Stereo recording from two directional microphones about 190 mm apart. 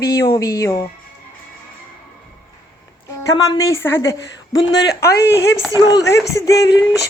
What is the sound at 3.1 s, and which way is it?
A woman's voice, 20° left (ahead or behind).